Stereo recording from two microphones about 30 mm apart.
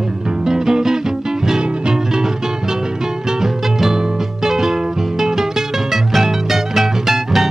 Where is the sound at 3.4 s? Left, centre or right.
Centre.